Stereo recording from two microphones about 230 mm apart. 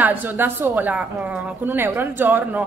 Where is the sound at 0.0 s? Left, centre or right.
Centre.